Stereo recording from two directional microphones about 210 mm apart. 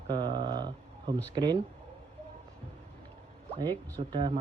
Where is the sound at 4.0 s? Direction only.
25° right (ahead or behind).